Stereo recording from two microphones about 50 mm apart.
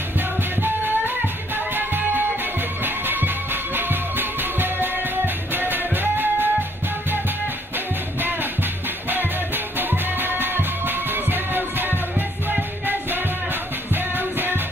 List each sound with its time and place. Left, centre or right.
0.6 s music: right
9.8 s music: right
13.9 s music: right